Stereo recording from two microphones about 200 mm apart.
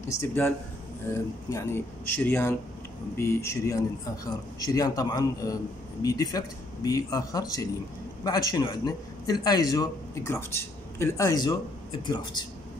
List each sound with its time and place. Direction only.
0.2 s a man's voice: 10° left (ahead or behind)